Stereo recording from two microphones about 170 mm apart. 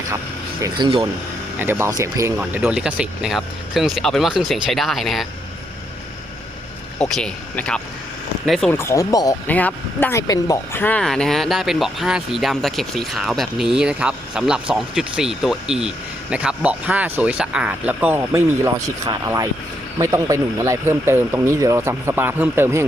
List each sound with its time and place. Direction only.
0.6 s speech: 30° right (ahead or behind)
1.5 s speech: 15° right (ahead or behind)
2.4 s speech: 10° right (ahead or behind)
7.0 s speech: 5° left (ahead or behind)
8.7 s speech: 15° left (ahead or behind); by 22.9 s 15° right (ahead or behind)